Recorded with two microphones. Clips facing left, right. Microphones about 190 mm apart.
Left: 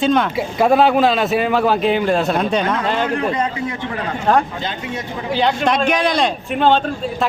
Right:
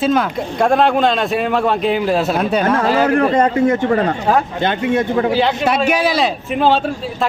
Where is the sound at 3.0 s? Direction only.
55° right (ahead or behind).